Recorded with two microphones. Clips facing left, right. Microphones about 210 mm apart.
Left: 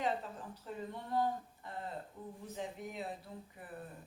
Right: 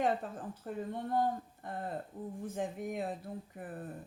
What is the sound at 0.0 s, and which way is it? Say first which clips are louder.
A woman's voice: right 5 dB; 50° right (ahead or behind).